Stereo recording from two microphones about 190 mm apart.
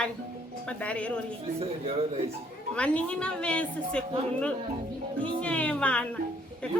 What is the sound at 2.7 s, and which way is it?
A woman's voice, 5° left (ahead or behind).